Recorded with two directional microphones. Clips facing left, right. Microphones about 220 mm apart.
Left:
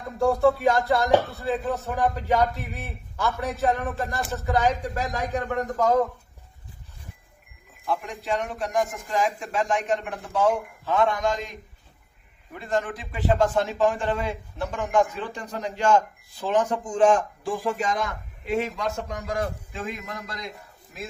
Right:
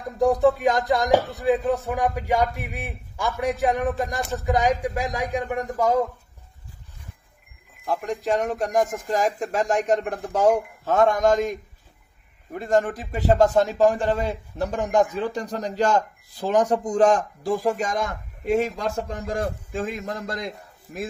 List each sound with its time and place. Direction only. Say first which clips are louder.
0.2 s speech: right 2 dB; 15° right (ahead or behind)
7.8 s speech: right 4 dB; 45° right (ahead or behind)
12.5 s a man's voice: right 6 dB; 45° right (ahead or behind)
18.9 s a man's voice: right 2 dB; 30° right (ahead or behind)
19.7 s a man's voice: right 5 dB; 40° right (ahead or behind)